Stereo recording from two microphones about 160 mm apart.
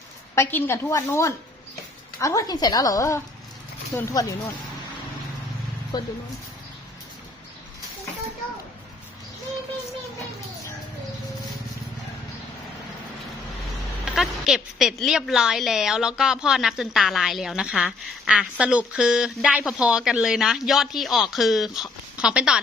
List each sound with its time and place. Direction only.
0.3 s a woman's voice: 15° left (ahead or behind)
5.9 s a woman's voice: 25° left (ahead or behind)
14.0 s a woman's voice: 5° right (ahead or behind)